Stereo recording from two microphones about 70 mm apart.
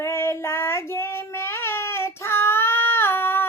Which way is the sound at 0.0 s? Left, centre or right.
Left.